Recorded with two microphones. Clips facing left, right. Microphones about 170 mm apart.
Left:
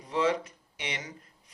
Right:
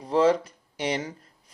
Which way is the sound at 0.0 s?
35° right (ahead or behind).